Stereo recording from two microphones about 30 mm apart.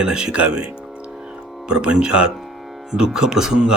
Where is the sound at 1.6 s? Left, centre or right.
Right.